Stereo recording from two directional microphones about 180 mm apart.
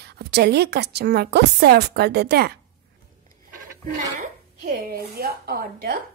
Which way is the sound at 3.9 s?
50° right (ahead or behind).